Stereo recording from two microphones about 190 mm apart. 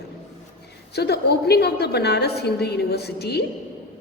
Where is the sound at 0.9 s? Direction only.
60° left (ahead or behind).